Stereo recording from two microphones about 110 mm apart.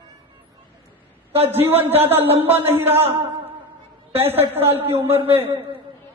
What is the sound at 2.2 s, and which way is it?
Speech, 60° right (ahead or behind).